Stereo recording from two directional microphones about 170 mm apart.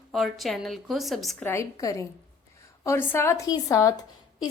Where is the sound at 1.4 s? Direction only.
15° left (ahead or behind).